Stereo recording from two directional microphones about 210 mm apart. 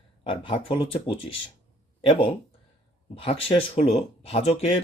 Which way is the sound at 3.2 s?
25° left (ahead or behind).